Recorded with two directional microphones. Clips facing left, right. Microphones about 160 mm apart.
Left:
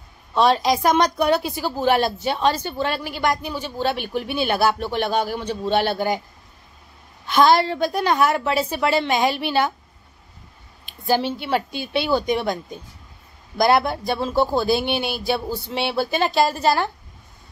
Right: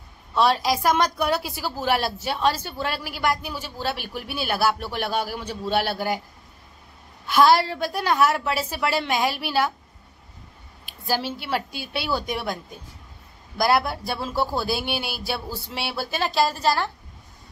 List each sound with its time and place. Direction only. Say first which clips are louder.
0.3 s a woman's voice: left 3 dB; 5° right (ahead or behind)
7.2 s a woman's voice: left 2 dB; 5° right (ahead or behind)
10.9 s a woman's voice: left 6 dB; 5° right (ahead or behind)